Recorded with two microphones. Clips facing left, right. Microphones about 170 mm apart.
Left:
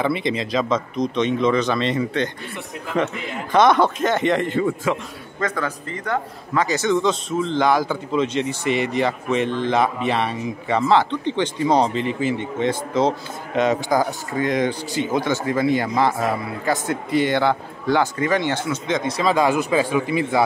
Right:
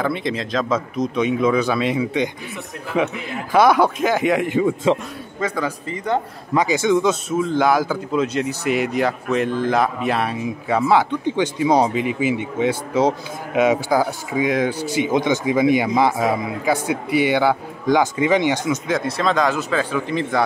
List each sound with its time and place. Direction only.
0.0 s a man's voice: centre (ahead or behind)